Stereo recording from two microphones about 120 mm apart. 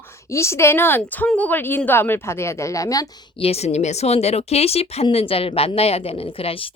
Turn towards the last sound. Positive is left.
turn(degrees=55)  # may be behind; listen again after turning